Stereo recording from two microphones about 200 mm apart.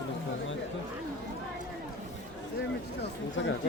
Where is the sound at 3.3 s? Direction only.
65° left (ahead or behind).